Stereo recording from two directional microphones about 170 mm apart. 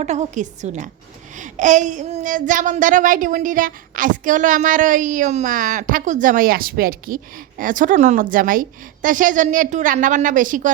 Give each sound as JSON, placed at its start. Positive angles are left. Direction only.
{"t": 0.0, "sound": "speech", "side_deg": -40}